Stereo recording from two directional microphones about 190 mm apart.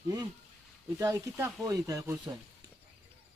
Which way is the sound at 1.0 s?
15° right (ahead or behind).